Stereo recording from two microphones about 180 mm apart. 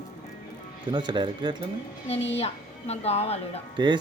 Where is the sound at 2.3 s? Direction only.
35° left (ahead or behind).